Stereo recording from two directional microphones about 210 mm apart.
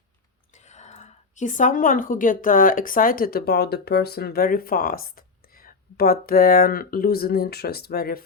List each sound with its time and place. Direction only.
0.5 s a woman's voice: 35° left (ahead or behind)